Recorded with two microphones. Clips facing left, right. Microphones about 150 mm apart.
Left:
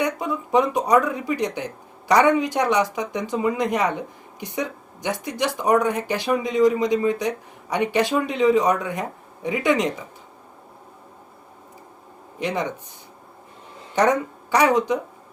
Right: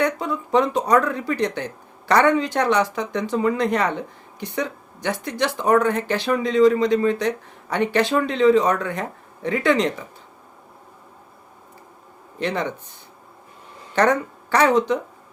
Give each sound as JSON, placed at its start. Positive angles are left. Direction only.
{"t": 0.0, "sound": "speech", "side_deg": 15}
{"t": 12.4, "sound": "speech", "side_deg": 15}
{"t": 13.9, "sound": "speech", "side_deg": 15}